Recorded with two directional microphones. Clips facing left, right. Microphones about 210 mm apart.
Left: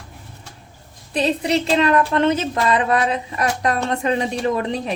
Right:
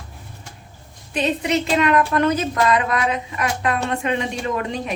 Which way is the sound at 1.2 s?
35° left (ahead or behind).